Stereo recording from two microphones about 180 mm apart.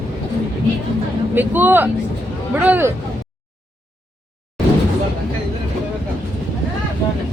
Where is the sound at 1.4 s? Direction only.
10° right (ahead or behind).